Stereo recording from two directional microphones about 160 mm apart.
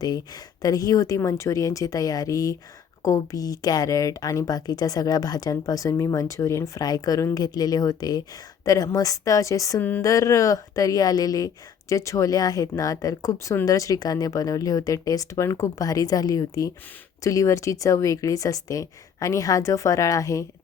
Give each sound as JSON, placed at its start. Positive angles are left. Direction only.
{"t": 0.0, "sound": "a woman's voice", "side_deg": 25}